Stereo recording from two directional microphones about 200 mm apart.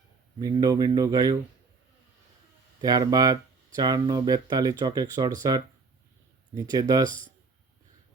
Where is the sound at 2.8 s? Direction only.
20° right (ahead or behind).